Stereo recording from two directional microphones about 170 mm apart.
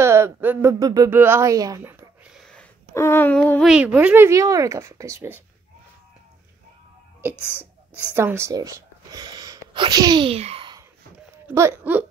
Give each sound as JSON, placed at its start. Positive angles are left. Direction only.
{"t": 0.0, "sound": "a woman's voice", "side_deg": -15}
{"t": 2.9, "sound": "speech", "side_deg": 15}
{"t": 3.7, "sound": "speech", "side_deg": -5}
{"t": 7.2, "sound": "speech", "side_deg": -10}
{"t": 11.4, "sound": "speech", "side_deg": -15}